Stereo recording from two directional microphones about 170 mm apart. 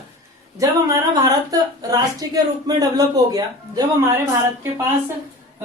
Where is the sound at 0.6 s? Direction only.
20° right (ahead or behind).